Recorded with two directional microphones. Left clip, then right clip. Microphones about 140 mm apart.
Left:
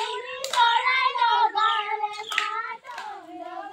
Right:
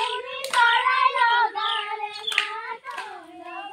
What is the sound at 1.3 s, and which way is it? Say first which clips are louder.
Cat: even; 35° right (ahead or behind).